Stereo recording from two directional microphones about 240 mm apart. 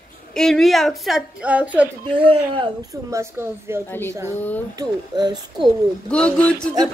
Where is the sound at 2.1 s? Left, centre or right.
Right.